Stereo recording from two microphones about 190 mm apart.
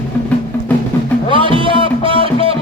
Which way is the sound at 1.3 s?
25° right (ahead or behind).